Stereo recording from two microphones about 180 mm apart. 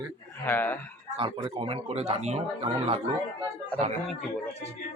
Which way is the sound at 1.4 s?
30° right (ahead or behind).